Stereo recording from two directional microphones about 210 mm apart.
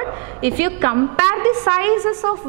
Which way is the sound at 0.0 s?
10° right (ahead or behind).